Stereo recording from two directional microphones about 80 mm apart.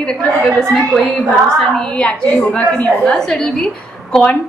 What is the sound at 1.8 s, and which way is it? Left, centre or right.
A woman's voice, centre.